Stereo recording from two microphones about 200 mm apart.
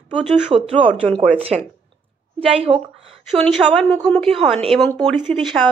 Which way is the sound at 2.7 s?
20° right (ahead or behind).